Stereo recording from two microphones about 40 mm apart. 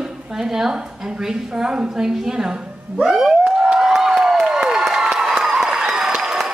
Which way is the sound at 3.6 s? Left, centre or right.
Centre.